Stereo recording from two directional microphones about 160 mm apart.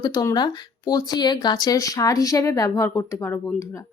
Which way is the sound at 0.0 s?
25° left (ahead or behind).